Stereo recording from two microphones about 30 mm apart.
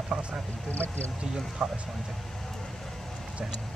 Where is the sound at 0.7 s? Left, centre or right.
Left.